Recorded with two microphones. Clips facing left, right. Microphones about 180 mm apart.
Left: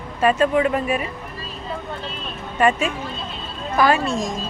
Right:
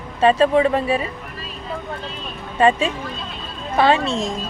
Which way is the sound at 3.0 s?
25° left (ahead or behind).